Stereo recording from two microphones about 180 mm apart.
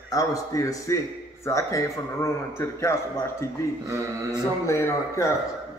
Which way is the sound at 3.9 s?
20° right (ahead or behind).